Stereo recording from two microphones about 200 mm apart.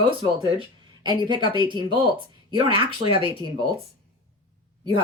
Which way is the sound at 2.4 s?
25° right (ahead or behind).